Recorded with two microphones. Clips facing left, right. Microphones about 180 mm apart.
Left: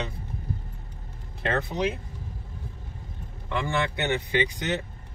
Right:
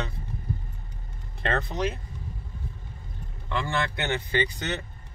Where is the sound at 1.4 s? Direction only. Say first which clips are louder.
Left 1 dB; 5° left (ahead or behind).